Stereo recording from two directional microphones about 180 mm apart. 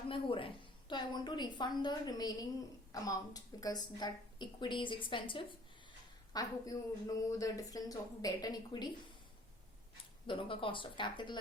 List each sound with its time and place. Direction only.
0.1 s a woman's voice: 30° left (ahead or behind)
10.2 s a woman's voice: 30° left (ahead or behind)